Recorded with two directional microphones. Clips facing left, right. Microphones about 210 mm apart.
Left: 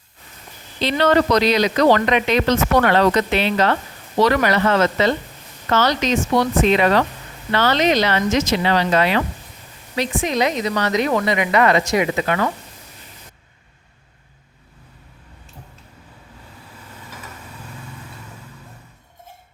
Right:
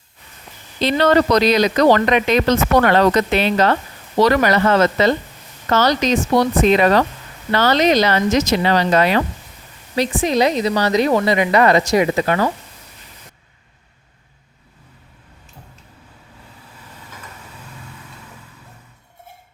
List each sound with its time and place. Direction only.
0.8 s a woman's voice: 45° right (ahead or behind)